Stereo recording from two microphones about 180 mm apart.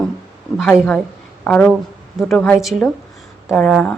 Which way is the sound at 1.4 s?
5° left (ahead or behind).